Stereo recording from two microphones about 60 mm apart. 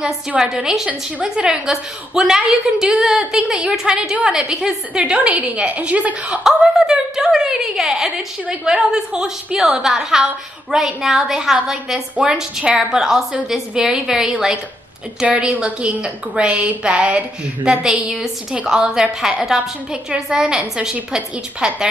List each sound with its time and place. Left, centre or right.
0.4 s a woman's voice: centre
6.4 s a woman's voice: centre